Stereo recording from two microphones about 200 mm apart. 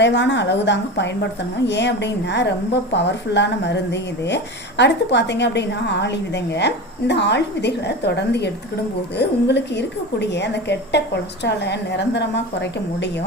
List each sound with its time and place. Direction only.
0.0 s a woman's voice: 60° left (ahead or behind)